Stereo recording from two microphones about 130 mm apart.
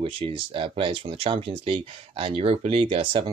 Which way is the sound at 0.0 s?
45° right (ahead or behind).